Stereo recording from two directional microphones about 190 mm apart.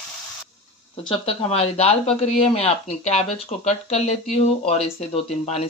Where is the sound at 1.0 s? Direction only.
30° left (ahead or behind).